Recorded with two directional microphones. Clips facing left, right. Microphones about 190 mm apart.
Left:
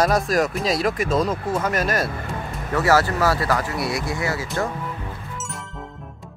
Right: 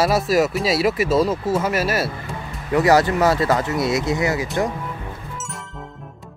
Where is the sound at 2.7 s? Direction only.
20° right (ahead or behind).